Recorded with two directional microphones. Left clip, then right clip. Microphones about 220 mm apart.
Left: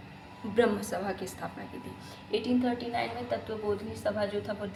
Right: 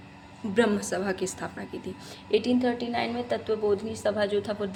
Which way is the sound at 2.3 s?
50° right (ahead or behind).